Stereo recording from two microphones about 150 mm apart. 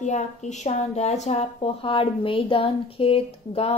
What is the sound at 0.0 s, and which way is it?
A woman's voice, 50° left (ahead or behind).